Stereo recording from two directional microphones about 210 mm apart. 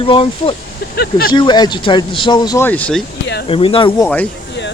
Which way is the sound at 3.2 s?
55° left (ahead or behind).